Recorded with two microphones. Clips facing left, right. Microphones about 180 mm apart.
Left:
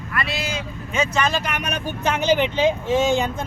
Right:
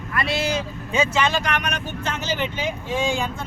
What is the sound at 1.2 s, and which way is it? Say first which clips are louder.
Speech: right 1 dB; centre (ahead or behind).